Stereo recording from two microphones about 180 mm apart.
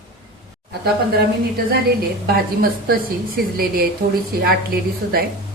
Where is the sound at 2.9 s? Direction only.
55° right (ahead or behind).